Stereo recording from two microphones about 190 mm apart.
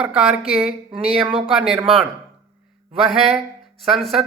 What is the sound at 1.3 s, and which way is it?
Speech, 30° right (ahead or behind).